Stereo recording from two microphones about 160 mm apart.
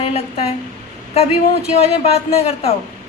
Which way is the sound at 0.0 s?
40° left (ahead or behind).